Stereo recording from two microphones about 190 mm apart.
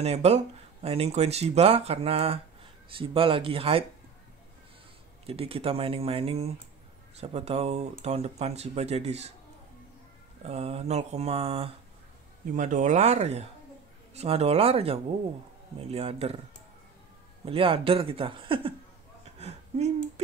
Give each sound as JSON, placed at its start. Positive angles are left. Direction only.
{"t": 0.0, "sound": "speech", "side_deg": -35}
{"t": 5.2, "sound": "speech", "side_deg": -30}
{"t": 10.4, "sound": "speech", "side_deg": -30}
{"t": 12.5, "sound": "speech", "side_deg": -40}
{"t": 17.5, "sound": "speech", "side_deg": -30}